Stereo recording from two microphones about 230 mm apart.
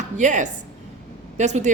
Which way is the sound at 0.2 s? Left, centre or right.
Right.